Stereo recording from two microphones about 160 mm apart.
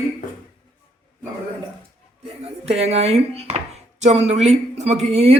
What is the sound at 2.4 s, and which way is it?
Speech, 40° right (ahead or behind).